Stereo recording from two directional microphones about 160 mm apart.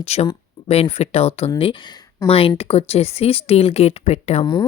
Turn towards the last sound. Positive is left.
turn(degrees=40)  # may be behind; listen again after turning